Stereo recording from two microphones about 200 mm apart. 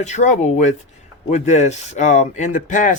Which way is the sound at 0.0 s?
35° left (ahead or behind).